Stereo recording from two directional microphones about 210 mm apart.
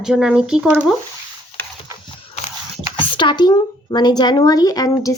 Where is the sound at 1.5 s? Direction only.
25° left (ahead or behind).